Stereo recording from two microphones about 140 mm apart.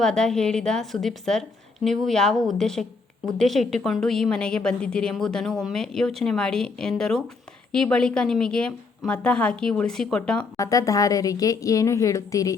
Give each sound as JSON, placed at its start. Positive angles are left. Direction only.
{"t": 0.0, "sound": "a woman's voice", "side_deg": 5}
{"t": 10.6, "sound": "a woman's voice", "side_deg": 25}